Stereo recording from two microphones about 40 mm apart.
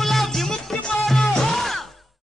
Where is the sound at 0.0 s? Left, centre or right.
Centre.